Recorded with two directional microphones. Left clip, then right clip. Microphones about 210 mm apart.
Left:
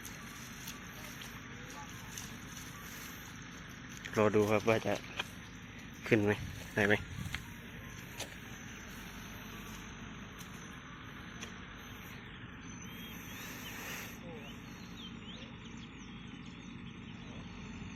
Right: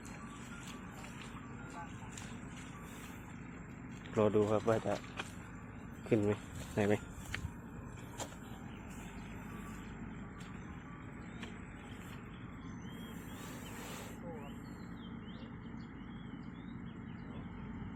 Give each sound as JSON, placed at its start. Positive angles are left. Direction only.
{"t": 4.1, "sound": "speech", "side_deg": 5}
{"t": 4.4, "sound": "speech", "side_deg": 20}
{"t": 6.1, "sound": "speech", "side_deg": 0}